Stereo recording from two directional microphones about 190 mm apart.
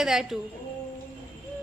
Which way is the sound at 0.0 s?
Centre (ahead or behind).